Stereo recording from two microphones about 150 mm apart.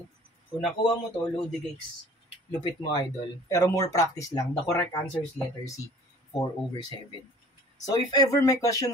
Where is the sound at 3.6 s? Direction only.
20° left (ahead or behind).